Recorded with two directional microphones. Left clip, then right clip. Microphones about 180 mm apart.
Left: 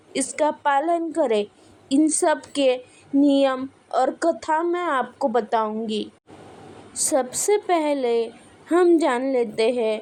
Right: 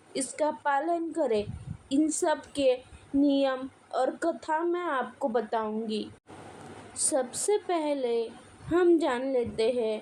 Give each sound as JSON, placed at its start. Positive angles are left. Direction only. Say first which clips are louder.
{"t": 0.1, "sound": "speech", "louder": "left 7 dB", "side_deg": 30}